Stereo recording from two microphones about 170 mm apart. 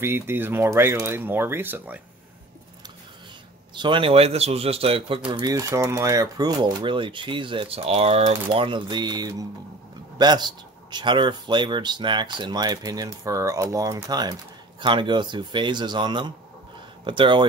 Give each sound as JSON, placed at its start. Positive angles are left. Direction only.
{"t": 0.0, "sound": "speech", "side_deg": -15}
{"t": 3.7, "sound": "speech", "side_deg": -30}